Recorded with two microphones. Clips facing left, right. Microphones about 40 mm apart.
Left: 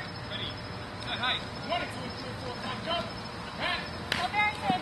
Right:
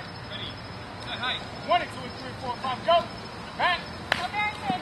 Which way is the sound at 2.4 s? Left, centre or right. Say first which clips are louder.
Right 8 dB; centre.